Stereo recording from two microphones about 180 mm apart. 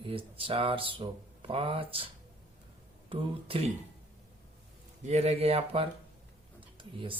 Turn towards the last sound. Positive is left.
turn(degrees=-30)  # may be behind; listen again after turning